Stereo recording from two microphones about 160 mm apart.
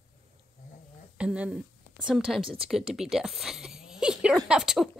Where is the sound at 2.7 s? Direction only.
Centre (ahead or behind).